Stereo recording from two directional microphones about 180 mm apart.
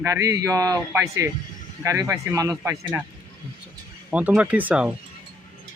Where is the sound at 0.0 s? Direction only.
15° right (ahead or behind).